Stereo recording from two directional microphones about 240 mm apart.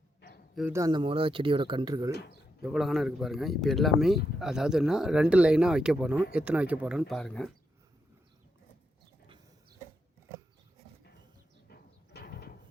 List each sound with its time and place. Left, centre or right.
0.5 s speech: centre
2.6 s speech: centre
11.7 s a sound: left